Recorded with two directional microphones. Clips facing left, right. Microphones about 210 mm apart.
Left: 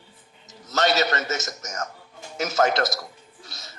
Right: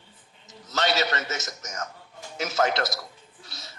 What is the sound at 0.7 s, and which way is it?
A man's voice, 45° left (ahead or behind).